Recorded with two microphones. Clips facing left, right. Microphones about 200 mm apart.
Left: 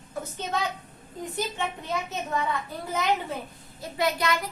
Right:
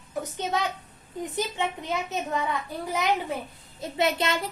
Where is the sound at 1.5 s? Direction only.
20° right (ahead or behind).